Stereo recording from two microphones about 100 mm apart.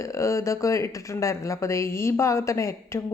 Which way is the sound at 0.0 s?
30° left (ahead or behind).